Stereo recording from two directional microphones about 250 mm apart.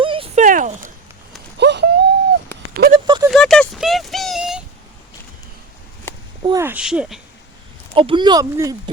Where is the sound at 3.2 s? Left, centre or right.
Centre.